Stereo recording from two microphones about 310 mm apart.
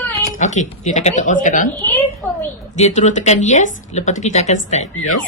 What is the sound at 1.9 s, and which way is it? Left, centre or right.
Speech, centre.